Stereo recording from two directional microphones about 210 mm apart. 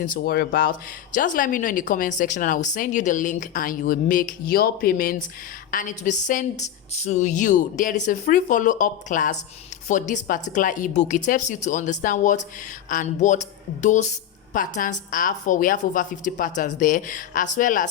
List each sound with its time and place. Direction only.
0.0 s speech: 45° left (ahead or behind)